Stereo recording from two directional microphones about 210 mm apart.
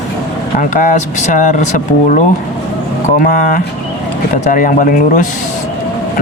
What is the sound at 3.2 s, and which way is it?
Speech, 40° left (ahead or behind).